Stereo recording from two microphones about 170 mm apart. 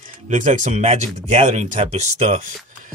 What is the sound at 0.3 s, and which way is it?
Speech, 45° right (ahead or behind).